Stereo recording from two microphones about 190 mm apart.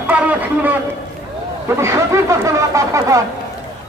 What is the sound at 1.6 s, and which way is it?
Speech, 15° right (ahead or behind).